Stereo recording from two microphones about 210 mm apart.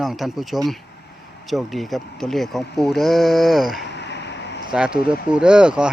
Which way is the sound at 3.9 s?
55° left (ahead or behind).